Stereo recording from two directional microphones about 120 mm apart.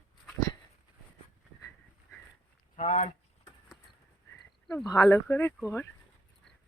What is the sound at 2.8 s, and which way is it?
Speech, 80° left.